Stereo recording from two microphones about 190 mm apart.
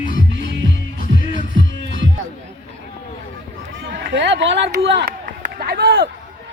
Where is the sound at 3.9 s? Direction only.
65° right (ahead or behind).